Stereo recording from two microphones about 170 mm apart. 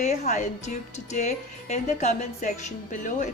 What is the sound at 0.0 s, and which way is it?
Speech, 45° left (ahead or behind).